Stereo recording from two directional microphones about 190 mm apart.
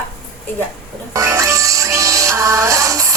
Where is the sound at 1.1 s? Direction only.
15° right (ahead or behind).